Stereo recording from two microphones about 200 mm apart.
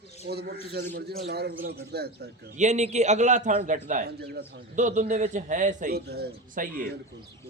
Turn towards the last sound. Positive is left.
turn(degrees=-50)  # may be behind; listen again after turning